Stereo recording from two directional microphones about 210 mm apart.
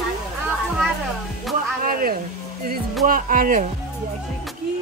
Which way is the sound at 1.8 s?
45° right (ahead or behind).